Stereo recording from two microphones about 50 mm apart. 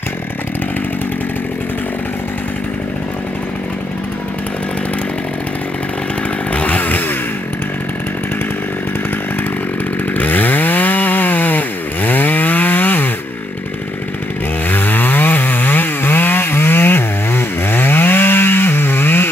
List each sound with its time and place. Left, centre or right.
6.5 s chainsaw: left
10.1 s chainsaw: left
14.7 s chainsaw: left